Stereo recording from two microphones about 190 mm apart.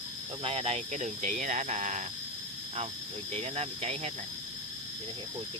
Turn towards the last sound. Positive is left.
turn(degrees=-35)  # may be behind; listen again after turning